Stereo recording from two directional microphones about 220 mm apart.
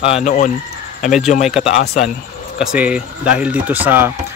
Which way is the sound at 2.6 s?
5° right (ahead or behind).